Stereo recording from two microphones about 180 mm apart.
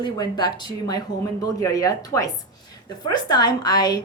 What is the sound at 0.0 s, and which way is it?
Speech, 25° left (ahead or behind).